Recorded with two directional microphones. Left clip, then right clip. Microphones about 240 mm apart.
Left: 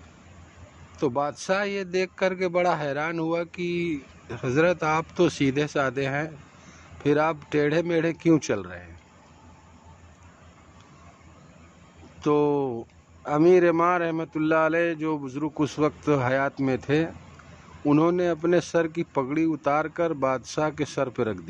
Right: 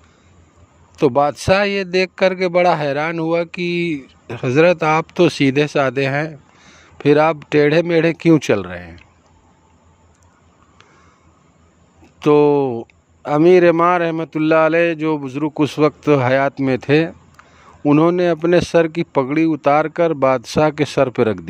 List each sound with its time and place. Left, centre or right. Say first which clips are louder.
0.9 s a man's voice: right 11 dB; right
12.2 s a man's voice: right 10 dB; right